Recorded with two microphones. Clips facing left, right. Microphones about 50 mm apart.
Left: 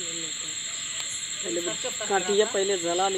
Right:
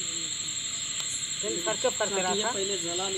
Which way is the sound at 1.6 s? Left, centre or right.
Right.